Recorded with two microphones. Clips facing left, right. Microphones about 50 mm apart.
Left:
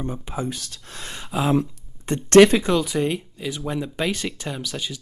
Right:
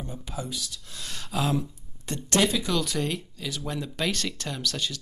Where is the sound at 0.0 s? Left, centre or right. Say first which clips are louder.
Left 7 dB; left.